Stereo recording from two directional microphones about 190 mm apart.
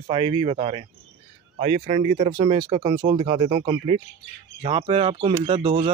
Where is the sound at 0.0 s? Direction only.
25° right (ahead or behind).